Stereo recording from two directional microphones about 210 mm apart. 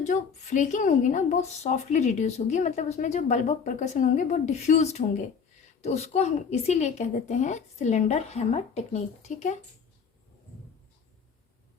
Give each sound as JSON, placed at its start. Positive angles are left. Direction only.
{"t": 0.0, "sound": "a woman's voice", "side_deg": 35}